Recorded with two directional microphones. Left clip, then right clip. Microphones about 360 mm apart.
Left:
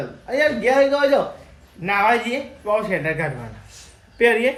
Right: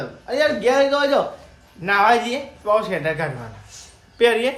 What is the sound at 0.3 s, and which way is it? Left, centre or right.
Speech, centre.